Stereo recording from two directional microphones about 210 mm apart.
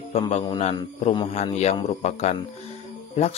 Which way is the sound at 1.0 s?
20° left (ahead or behind).